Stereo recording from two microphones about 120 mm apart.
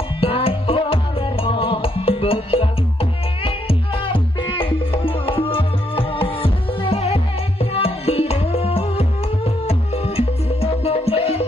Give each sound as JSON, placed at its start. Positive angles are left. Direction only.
{"t": 0.2, "sound": "music", "side_deg": 55}